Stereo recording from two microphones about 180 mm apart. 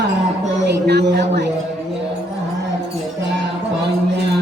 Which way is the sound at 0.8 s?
65° right (ahead or behind).